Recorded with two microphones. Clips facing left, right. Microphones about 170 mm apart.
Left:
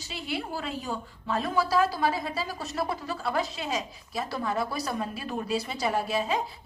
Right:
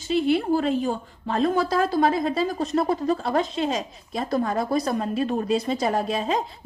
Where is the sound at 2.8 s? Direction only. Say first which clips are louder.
Right 9 dB; 40° right (ahead or behind).